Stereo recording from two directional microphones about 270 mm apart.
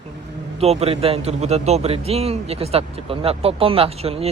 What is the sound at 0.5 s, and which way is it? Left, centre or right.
A man's voice, right.